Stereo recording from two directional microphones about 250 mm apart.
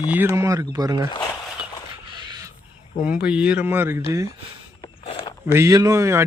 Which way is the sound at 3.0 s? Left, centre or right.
Centre.